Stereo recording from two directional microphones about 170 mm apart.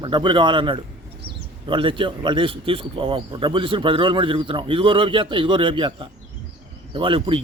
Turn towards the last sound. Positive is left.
turn(degrees=-30)  # may be behind; listen again after turning